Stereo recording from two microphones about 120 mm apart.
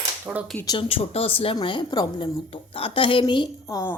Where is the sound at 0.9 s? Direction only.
55° left (ahead or behind).